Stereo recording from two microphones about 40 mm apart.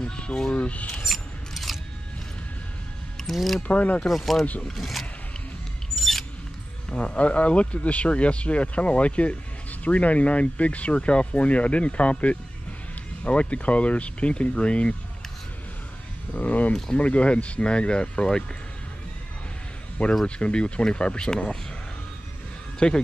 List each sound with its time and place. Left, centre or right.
0.0 s speech: left
1.0 s scissors: centre
3.3 s speech: centre
3.6 s speech: left
4.7 s speech: centre
5.9 s a sound: centre
6.9 s speech: left
16.3 s speech: left
16.9 s speech: left
20.2 s speech: left
22.8 s speech: left